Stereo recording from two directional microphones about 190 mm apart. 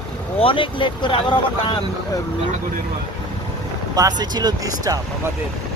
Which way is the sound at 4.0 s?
20° right (ahead or behind).